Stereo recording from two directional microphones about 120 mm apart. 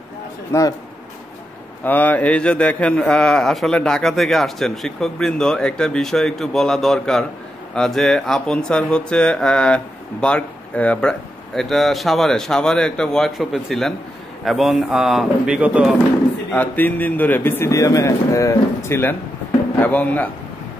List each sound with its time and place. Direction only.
0.5 s a man's voice: 25° left (ahead or behind)
1.9 s a man's voice: 15° left (ahead or behind); by 16.0 s 10° right (ahead or behind)
16.5 s a man's voice: 15° left (ahead or behind)